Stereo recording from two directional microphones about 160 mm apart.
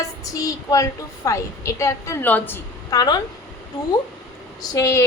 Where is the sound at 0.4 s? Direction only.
20° left (ahead or behind).